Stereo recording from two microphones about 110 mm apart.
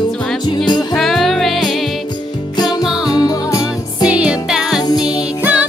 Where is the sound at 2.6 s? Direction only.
35° left (ahead or behind).